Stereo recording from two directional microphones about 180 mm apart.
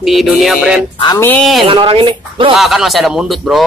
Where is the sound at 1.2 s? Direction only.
5° left (ahead or behind).